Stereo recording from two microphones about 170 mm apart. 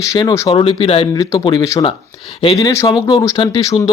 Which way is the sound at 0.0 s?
20° left (ahead or behind).